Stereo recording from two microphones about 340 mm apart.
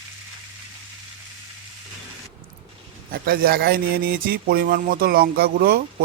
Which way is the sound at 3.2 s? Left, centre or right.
Right.